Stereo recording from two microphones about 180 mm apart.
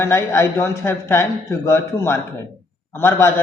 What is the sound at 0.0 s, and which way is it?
A man's voice, 15° left (ahead or behind).